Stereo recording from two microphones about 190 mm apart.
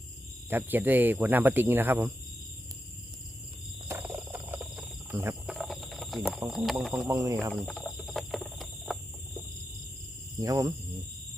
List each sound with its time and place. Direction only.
0.5 s speech: 10° right (ahead or behind)
3.8 s cricket: 10° right (ahead or behind)
5.5 s a sound: centre (ahead or behind)
6.5 s speech: centre (ahead or behind)
7.1 s speech: 20° right (ahead or behind)
7.5 s cricket: 5° left (ahead or behind)
10.4 s speech: 20° right (ahead or behind)